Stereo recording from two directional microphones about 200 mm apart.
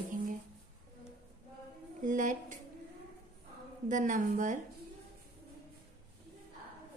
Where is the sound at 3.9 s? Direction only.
40° right (ahead or behind).